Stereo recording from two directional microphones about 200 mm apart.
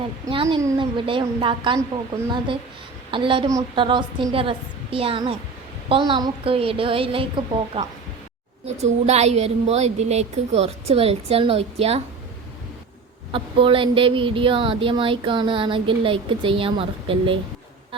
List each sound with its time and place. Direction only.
0.3 s speech: 25° right (ahead or behind)
3.1 s a woman's voice: 25° right (ahead or behind)
13.3 s speech: 25° right (ahead or behind)